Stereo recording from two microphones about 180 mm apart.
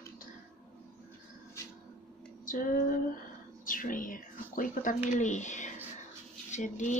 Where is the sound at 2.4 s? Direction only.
50° left (ahead or behind).